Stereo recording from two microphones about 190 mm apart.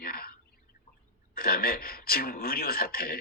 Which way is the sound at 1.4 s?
50° left (ahead or behind).